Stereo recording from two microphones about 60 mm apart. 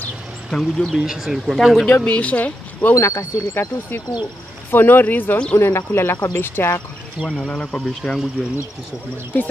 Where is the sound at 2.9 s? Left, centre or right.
Left.